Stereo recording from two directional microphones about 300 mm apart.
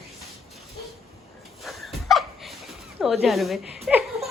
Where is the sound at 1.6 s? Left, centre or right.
Centre.